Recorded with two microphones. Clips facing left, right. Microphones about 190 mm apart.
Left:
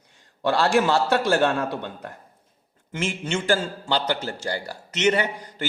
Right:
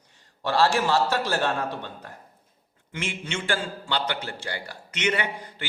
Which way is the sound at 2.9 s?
40° left (ahead or behind).